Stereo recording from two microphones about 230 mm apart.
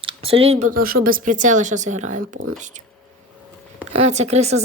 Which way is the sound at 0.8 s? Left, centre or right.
Right.